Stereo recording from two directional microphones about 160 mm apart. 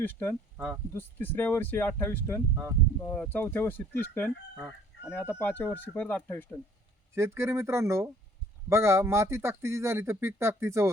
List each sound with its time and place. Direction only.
0.0 s speech: 10° left (ahead or behind)
0.5 s speech: 10° right (ahead or behind)
0.9 s speech: 10° left (ahead or behind)
4.5 s chicken: 5° right (ahead or behind)
5.1 s speech: 15° left (ahead or behind)
7.1 s speech: 15° right (ahead or behind)